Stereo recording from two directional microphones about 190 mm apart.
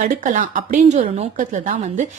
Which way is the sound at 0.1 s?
40° right (ahead or behind).